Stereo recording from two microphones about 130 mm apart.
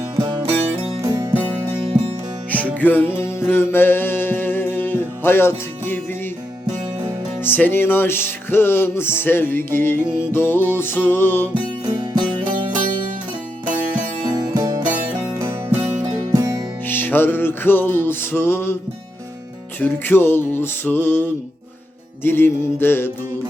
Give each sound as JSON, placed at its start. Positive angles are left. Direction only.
{"t": 0.2, "sound": "music", "side_deg": -35}
{"t": 0.7, "sound": "music", "side_deg": -45}
{"t": 1.0, "sound": "music", "side_deg": -25}
{"t": 2.7, "sound": "music", "side_deg": 15}
{"t": 7.4, "sound": "music", "side_deg": 15}
{"t": 11.5, "sound": "music", "side_deg": -35}
{"t": 13.7, "sound": "music", "side_deg": -10}
{"t": 14.3, "sound": "music", "side_deg": -30}
{"t": 16.3, "sound": "music", "side_deg": -25}
{"t": 16.8, "sound": "music", "side_deg": 15}
{"t": 19.8, "sound": "music", "side_deg": 15}